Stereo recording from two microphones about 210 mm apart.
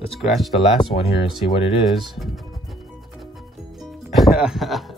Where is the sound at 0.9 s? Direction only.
35° left (ahead or behind).